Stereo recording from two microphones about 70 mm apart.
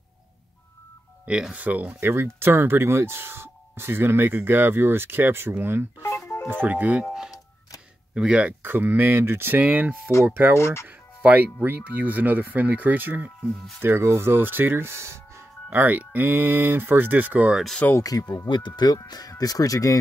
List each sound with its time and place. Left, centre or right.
1.2 s speech: centre
2.0 s speech: right
5.9 s music: left
6.6 s speech: right
8.1 s speech: centre
8.6 s speech: right
10.6 s speech: left
11.6 s speech: right
13.7 s speech: right
15.8 s speech: right
17.8 s speech: left
18.5 s speech: left
19.0 s speech: left